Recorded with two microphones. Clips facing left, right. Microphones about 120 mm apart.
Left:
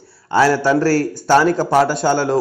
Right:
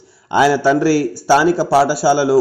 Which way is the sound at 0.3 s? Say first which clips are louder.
Right 1 dB; 15° right (ahead or behind).